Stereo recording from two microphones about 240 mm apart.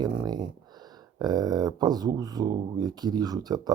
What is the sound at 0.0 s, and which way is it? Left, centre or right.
Speech, centre.